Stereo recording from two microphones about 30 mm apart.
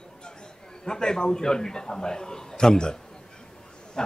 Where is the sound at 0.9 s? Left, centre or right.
Left.